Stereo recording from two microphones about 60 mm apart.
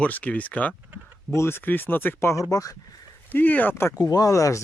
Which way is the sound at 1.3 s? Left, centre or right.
Left.